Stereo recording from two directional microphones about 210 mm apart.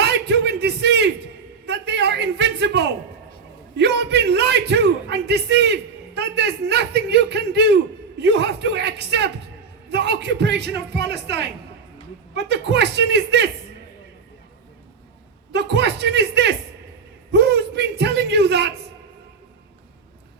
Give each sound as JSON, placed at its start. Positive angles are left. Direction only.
{"t": 0.0, "sound": "a sound", "side_deg": -55}
{"t": 3.8, "sound": "a man's voice", "side_deg": -55}
{"t": 15.5, "sound": "a man's voice", "side_deg": -55}